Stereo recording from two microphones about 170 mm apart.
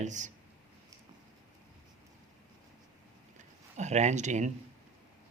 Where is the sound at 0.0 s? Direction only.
45° right (ahead or behind).